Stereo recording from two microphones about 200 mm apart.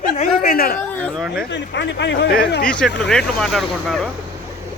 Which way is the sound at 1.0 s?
5° left (ahead or behind).